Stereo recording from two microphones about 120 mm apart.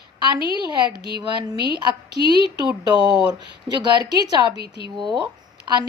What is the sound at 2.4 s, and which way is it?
Speech, 35° right (ahead or behind).